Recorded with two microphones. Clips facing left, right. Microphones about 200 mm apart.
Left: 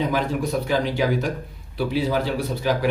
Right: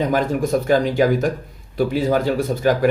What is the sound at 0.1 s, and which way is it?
Speech, 45° right (ahead or behind).